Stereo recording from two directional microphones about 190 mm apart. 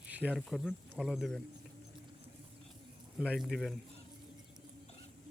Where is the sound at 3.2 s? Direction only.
5° right (ahead or behind).